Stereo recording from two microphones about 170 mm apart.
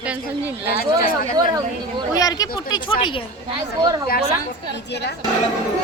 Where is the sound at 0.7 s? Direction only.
60° left (ahead or behind).